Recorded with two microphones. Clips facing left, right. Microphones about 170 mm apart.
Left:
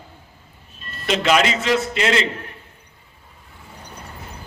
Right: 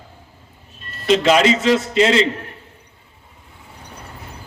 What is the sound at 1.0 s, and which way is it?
A man's voice, 25° right (ahead or behind).